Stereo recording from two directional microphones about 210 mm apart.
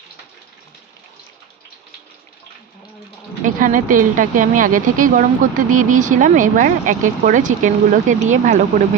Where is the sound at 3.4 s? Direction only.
40° right (ahead or behind).